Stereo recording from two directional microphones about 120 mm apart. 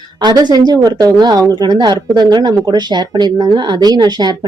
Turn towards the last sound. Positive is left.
turn(degrees=-35)  # may be behind; listen again after turning